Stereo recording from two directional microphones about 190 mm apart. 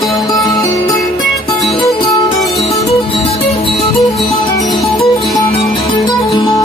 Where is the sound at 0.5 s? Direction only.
20° left (ahead or behind).